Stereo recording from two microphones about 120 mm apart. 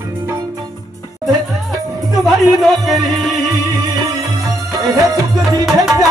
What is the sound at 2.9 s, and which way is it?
Music, centre (ahead or behind).